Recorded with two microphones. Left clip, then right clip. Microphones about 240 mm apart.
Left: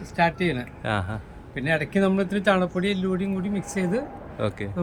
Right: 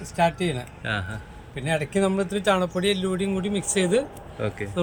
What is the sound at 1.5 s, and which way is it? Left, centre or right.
Speech, right.